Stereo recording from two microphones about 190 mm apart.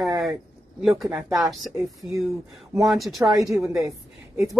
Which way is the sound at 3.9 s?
15° right (ahead or behind).